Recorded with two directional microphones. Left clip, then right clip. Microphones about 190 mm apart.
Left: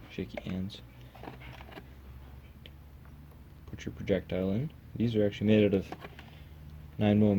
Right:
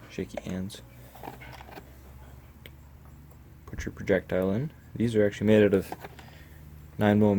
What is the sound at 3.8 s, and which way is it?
Speech, 15° right (ahead or behind).